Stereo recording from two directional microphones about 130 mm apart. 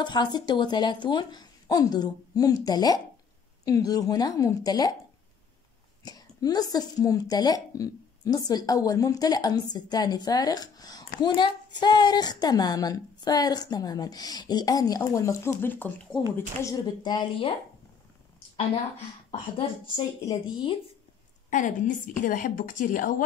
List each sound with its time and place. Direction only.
0.0 s a woman's voice: 35° left (ahead or behind)
6.0 s a woman's voice: 30° left (ahead or behind); by 16.2 s 15° left (ahead or behind)
16.3 s a woman's voice: 25° left (ahead or behind)
20.0 s a woman's voice: 35° left (ahead or behind)
21.5 s a woman's voice: 75° left (ahead or behind)